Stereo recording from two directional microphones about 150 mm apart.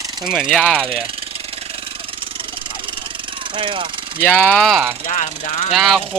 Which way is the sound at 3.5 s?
35° right (ahead or behind).